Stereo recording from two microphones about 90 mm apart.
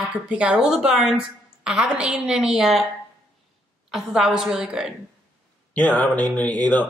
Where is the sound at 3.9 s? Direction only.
5° right (ahead or behind).